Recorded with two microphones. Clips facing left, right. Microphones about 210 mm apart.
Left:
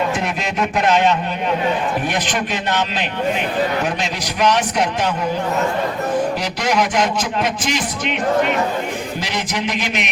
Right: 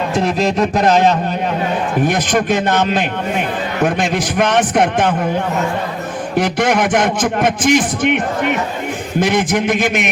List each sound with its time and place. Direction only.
0.2 s a man's voice: 35° right (ahead or behind); by 5.1 s 50° right (ahead or behind)
6.3 s a man's voice: 50° right (ahead or behind)